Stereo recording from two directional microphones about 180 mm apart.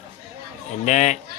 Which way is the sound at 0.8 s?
40° left (ahead or behind).